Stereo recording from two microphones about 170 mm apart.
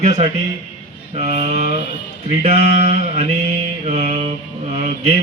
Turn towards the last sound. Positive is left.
turn(degrees=-40)  # may be behind; listen again after turning